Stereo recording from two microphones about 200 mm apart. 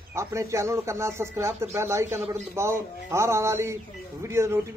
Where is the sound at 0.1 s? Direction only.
15° right (ahead or behind).